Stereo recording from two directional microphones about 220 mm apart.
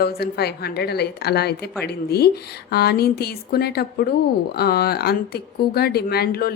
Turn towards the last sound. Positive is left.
turn(degrees=45)  # may be behind; listen again after turning